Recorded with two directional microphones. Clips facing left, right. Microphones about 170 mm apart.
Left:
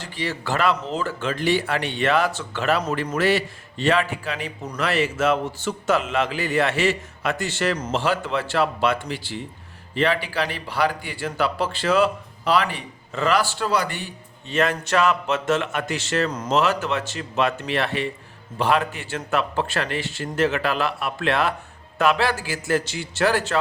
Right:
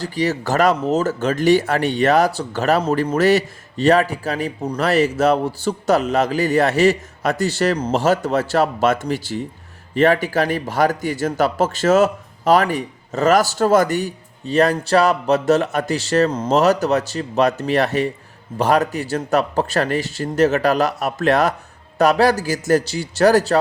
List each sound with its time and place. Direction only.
0.0 s speech: 40° right (ahead or behind)